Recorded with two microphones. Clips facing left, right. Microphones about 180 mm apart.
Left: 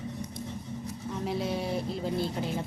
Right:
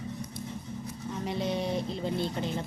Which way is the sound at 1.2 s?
5° left (ahead or behind).